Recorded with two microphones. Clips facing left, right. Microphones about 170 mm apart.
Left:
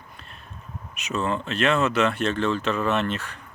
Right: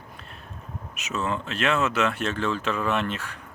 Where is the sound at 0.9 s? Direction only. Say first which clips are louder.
Left 2 dB; 5° right (ahead or behind).